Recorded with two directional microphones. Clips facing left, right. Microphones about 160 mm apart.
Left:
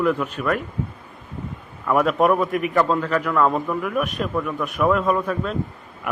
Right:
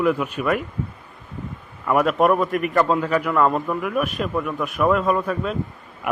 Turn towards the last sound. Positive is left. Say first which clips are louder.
# even
turn(degrees=0)  # may be behind; listen again after turning